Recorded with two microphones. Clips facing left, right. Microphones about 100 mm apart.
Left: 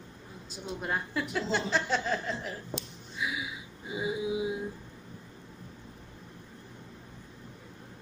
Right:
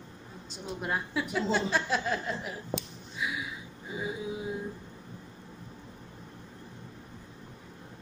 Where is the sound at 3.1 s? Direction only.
Centre (ahead or behind).